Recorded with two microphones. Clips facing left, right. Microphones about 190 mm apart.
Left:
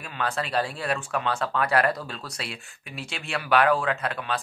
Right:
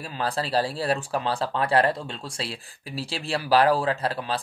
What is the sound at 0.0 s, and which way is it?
Speech, 35° right (ahead or behind).